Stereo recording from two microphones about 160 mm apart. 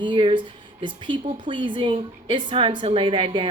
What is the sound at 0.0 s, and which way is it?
Speech, 30° right (ahead or behind).